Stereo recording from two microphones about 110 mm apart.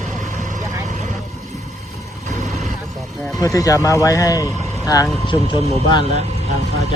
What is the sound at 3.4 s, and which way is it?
Speech, 30° left (ahead or behind).